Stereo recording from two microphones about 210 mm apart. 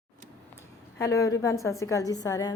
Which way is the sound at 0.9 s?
15° left (ahead or behind).